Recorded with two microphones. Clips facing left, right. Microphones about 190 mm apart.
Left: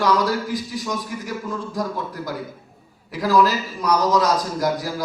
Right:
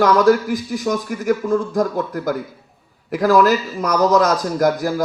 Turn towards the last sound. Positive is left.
turn(degrees=-50)  # may be behind; listen again after turning